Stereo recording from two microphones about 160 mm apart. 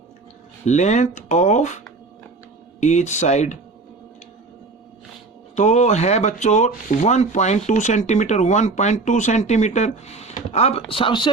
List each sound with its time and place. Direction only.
0.6 s speech: 45° left (ahead or behind)
2.8 s speech: 45° left (ahead or behind)
5.5 s speech: 45° left (ahead or behind); by 11.3 s 30° left (ahead or behind)